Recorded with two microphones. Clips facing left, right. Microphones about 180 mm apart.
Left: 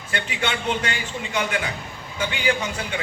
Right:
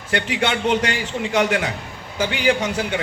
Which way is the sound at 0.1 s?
80° right.